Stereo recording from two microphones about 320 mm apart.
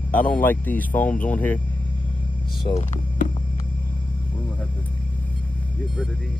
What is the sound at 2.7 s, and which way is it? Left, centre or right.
Speech, centre.